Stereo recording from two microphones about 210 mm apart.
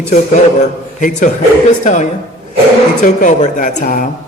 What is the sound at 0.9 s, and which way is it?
A man's voice, 35° left (ahead or behind).